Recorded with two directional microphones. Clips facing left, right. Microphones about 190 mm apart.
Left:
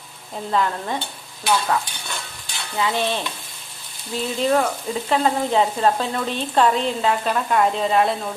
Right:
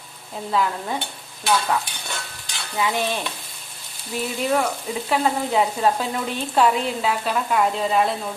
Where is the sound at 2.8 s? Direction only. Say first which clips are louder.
Left 1 dB; 10° right (ahead or behind).